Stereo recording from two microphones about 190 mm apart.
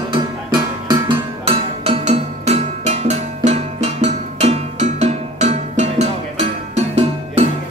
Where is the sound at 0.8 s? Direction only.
25° right (ahead or behind).